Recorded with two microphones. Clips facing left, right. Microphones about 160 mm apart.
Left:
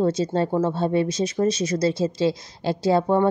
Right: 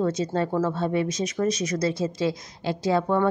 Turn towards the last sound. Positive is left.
turn(degrees=30)  # may be behind; listen again after turning